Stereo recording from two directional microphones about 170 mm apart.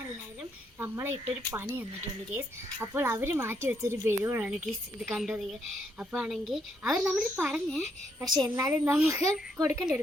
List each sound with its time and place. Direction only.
0.8 s speech: 15° right (ahead or behind)
2.8 s speech: 15° right (ahead or behind)
8.4 s speech: 15° right (ahead or behind)